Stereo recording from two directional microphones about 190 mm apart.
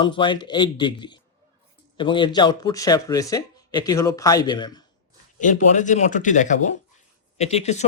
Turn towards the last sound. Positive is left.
turn(degrees=35)  # may be behind; listen again after turning